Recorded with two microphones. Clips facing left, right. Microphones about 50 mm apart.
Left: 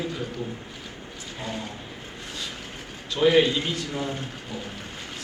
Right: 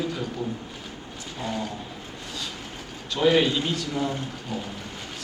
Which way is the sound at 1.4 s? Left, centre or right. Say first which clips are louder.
Right 3 dB; right.